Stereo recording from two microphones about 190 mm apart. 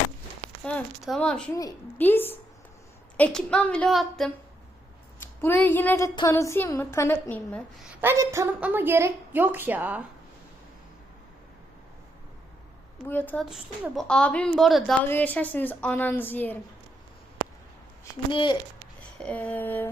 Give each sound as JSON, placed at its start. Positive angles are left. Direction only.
{"t": 0.6, "sound": "a woman's voice", "side_deg": 5}
{"t": 5.4, "sound": "a woman's voice", "side_deg": 10}
{"t": 7.8, "sound": "a woman's voice", "side_deg": -5}
{"t": 8.1, "sound": "a woman's voice", "side_deg": -15}
{"t": 13.1, "sound": "a woman's voice", "side_deg": 10}
{"t": 18.0, "sound": "speech", "side_deg": 25}
{"t": 19.2, "sound": "a woman's voice", "side_deg": 5}